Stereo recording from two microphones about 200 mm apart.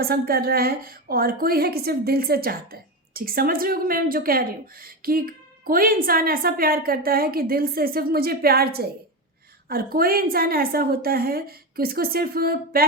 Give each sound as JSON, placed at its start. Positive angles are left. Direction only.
{"t": 0.0, "sound": "a woman's voice", "side_deg": -50}